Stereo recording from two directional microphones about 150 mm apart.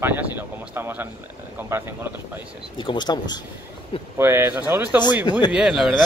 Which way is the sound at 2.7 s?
30° left (ahead or behind).